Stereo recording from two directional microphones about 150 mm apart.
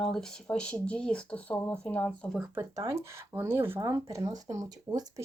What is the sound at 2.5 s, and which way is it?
Speech, 20° right (ahead or behind).